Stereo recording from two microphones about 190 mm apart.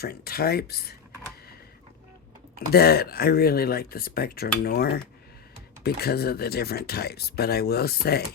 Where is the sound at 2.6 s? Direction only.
55° left (ahead or behind).